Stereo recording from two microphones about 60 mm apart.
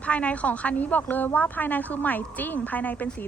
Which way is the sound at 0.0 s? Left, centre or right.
Left.